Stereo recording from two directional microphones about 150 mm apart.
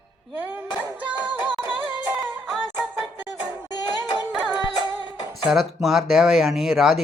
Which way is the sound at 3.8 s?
30° left (ahead or behind).